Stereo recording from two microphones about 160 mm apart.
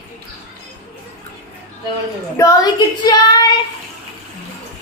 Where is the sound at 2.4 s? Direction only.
20° left (ahead or behind).